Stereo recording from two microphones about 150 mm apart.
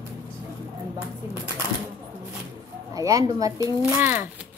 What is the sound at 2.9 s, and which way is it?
Speech, 25° right (ahead or behind).